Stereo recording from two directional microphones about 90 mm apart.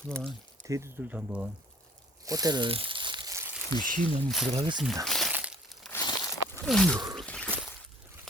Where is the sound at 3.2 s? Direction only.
30° right (ahead or behind).